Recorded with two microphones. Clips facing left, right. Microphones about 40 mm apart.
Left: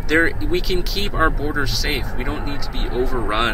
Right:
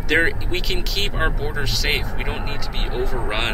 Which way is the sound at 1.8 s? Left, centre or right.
Right.